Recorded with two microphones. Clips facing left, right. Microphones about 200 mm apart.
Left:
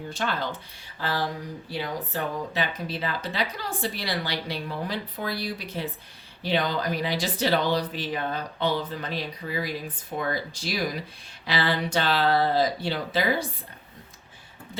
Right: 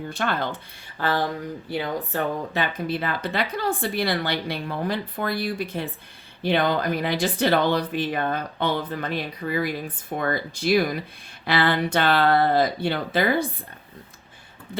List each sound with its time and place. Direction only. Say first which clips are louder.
0.1 s speech: right 3 dB; 55° right (ahead or behind)
0.9 s a sound: right 5 dB; 55° right (ahead or behind)
1.8 s speech: right 3 dB; 55° right (ahead or behind)